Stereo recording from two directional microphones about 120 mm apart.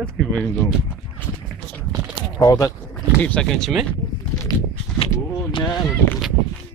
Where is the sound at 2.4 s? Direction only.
30° left (ahead or behind).